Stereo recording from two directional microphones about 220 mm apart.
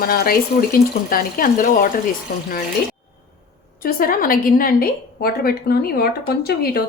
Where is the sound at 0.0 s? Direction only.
45° left (ahead or behind).